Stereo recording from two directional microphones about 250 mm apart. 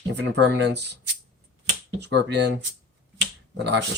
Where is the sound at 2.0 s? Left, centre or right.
Right.